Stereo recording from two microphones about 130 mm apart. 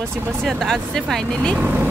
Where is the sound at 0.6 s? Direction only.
5° left (ahead or behind).